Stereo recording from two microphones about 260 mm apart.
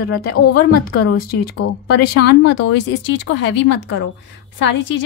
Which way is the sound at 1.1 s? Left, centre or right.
Left.